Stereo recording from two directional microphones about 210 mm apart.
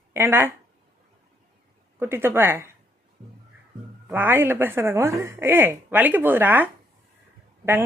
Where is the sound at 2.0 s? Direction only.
10° right (ahead or behind).